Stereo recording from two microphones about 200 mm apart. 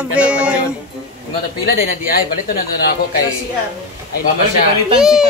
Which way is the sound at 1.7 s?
50° left (ahead or behind).